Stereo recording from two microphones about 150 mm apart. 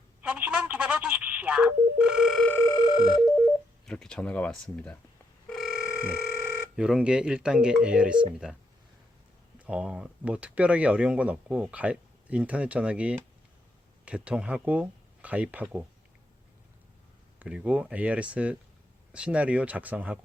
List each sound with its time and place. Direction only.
0.2 s telephone dialing: 10° right (ahead or behind)
2.6 s telephone bell ringing: 25° left (ahead or behind)
3.8 s speech: 5° left (ahead or behind)
5.5 s telephone: centre (ahead or behind)
6.5 s speech: 5° right (ahead or behind)
17.4 s speech: 10° right (ahead or behind)